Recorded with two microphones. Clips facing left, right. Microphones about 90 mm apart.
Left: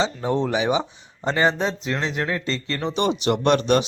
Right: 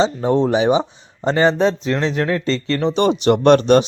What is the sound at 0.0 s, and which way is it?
Speech, 30° right (ahead or behind).